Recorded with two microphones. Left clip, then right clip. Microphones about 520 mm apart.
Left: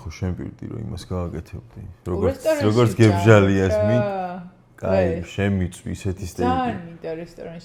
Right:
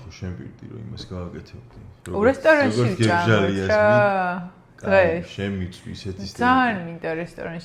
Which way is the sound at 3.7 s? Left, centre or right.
Right.